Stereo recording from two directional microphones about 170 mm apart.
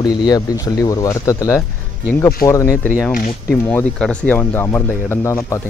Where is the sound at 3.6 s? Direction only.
10° left (ahead or behind).